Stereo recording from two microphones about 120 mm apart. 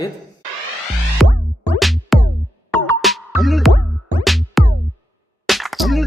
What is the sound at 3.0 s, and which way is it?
Music, centre (ahead or behind).